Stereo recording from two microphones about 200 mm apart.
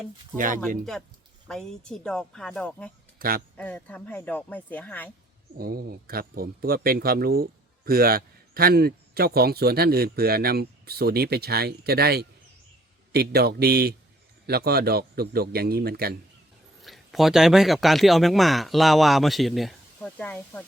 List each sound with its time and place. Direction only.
0.3 s speech: 40° right (ahead or behind)
1.5 s speech: 5° left (ahead or behind)
3.2 s speech: 45° right (ahead or behind)
3.6 s speech: 10° left (ahead or behind)
5.5 s a man's voice: 50° right (ahead or behind)
16.8 s speech: centre (ahead or behind)